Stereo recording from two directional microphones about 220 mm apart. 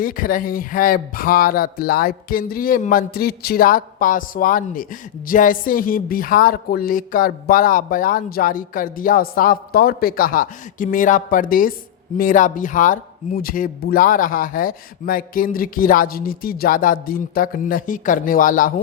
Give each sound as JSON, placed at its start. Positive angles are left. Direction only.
{"t": 0.0, "sound": "speech", "side_deg": 40}